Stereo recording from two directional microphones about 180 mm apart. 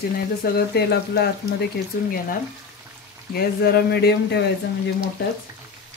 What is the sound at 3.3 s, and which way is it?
Speech, 60° left (ahead or behind).